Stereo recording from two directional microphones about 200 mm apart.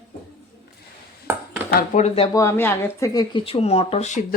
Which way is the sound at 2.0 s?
30° left (ahead or behind).